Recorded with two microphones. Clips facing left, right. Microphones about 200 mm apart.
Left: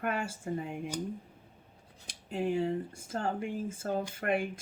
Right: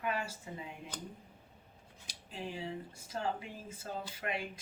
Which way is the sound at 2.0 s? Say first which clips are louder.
Left 11 dB; 50° left (ahead or behind).